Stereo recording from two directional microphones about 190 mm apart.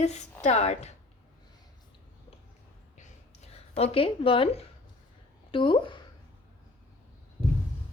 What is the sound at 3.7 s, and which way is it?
A woman's voice, 30° left (ahead or behind).